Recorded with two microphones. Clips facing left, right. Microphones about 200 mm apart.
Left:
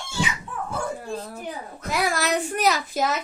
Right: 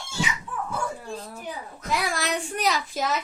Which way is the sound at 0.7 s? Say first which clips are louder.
Left 5 dB; 40° left (ahead or behind).